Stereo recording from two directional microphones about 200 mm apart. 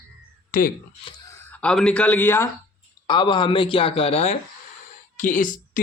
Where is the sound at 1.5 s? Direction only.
5° left (ahead or behind).